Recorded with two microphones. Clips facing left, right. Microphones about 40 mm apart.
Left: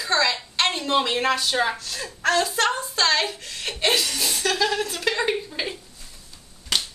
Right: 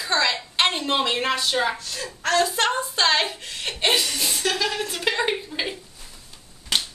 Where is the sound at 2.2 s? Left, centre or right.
Centre.